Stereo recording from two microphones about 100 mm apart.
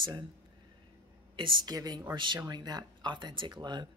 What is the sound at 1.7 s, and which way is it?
Speech, 40° right (ahead or behind).